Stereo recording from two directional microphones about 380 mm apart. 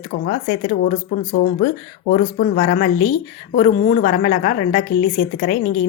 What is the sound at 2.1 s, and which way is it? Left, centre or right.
Speech, left.